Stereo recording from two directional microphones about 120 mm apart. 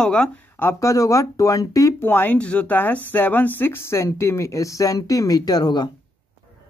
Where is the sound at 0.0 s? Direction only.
5° left (ahead or behind).